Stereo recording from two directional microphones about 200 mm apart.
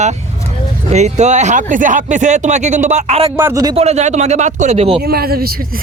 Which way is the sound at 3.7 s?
35° right (ahead or behind).